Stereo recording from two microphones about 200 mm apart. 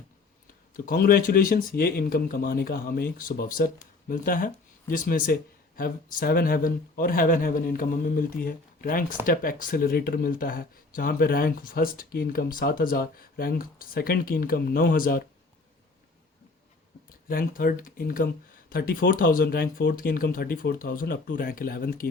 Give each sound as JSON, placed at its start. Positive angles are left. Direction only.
{"t": 0.9, "sound": "speech", "side_deg": 50}
{"t": 17.1, "sound": "speech", "side_deg": 45}